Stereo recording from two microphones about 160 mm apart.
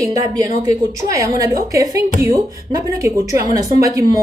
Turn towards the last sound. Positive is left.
turn(degrees=-20)  # may be behind; listen again after turning